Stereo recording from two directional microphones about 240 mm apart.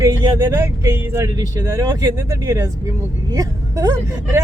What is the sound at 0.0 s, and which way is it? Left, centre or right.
A woman's voice, centre.